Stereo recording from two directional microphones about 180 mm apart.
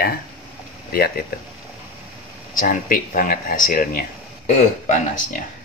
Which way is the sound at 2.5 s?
50° left (ahead or behind).